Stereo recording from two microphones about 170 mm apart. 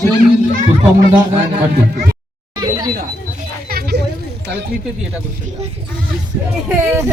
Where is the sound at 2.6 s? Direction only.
25° right (ahead or behind).